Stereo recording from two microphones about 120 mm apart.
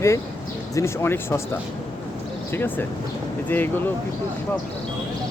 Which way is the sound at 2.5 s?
15° left (ahead or behind).